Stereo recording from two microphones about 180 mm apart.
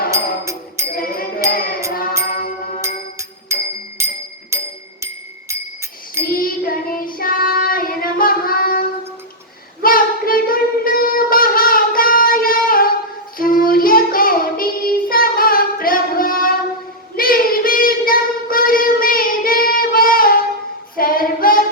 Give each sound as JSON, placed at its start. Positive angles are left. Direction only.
{"t": 0.1, "sound": "music", "side_deg": -15}
{"t": 0.9, "sound": "music", "side_deg": 55}
{"t": 2.8, "sound": "music", "side_deg": -15}
{"t": 6.2, "sound": "child singing", "side_deg": 55}